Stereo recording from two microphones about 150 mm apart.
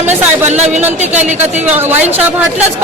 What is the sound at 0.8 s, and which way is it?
A man's voice, 10° right (ahead or behind).